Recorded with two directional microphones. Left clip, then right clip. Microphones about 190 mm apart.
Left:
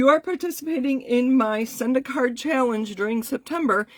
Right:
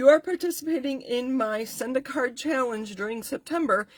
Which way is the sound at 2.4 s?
40° left (ahead or behind).